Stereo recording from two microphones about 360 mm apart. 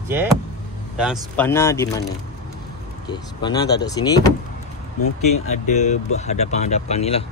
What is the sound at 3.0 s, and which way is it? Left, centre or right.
Speech, centre.